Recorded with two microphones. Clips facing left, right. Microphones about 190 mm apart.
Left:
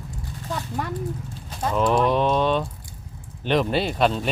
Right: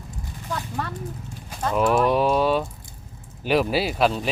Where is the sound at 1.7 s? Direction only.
5° right (ahead or behind).